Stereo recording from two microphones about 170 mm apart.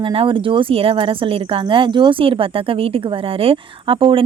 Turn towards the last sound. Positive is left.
turn(degrees=-30)  # may be behind; listen again after turning